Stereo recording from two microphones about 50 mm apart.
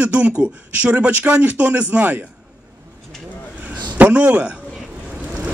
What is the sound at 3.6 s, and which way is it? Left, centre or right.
Speech, right.